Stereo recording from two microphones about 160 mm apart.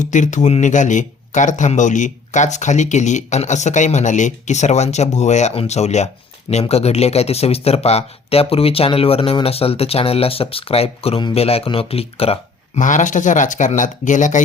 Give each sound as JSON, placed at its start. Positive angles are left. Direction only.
{"t": 0.0, "sound": "speech", "side_deg": 50}
{"t": 12.8, "sound": "speech", "side_deg": 50}